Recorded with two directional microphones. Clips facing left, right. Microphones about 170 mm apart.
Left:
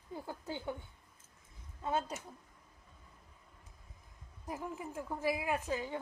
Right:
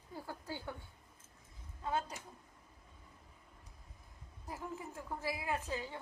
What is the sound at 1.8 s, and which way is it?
Speech, 25° left (ahead or behind).